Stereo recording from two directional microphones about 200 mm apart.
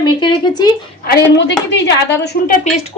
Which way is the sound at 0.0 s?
20° left (ahead or behind).